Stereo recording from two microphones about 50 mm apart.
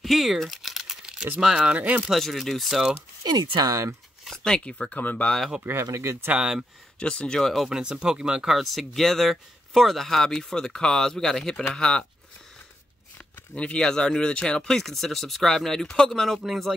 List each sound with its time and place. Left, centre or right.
0.0 s a sound: centre
1.1 s keys jangling: right
1.6 s speech: right
2.0 s speech: centre
4.2 s a sound: centre
4.6 s speech: centre
5.6 s speech: right
6.2 s speech: right
7.0 s speech: left
7.5 s speech: centre
7.8 s speech: centre
8.5 s speech: centre
13.6 s speech: centre